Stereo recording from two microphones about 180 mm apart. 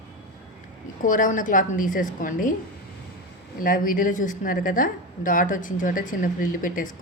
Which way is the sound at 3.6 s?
50° left (ahead or behind).